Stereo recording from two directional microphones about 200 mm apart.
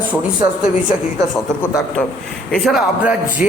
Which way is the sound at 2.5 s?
Centre (ahead or behind).